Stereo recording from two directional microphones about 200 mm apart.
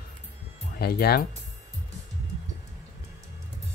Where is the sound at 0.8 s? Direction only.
50° left (ahead or behind).